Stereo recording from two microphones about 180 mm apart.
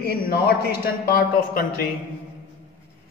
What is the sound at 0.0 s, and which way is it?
A man's voice, 60° left (ahead or behind).